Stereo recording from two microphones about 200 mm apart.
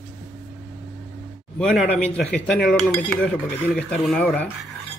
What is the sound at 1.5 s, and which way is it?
Speech, 5° left (ahead or behind).